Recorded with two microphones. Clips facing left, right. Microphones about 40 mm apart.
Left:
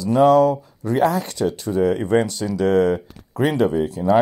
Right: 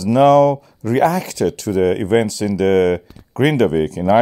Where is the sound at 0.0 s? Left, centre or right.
Right.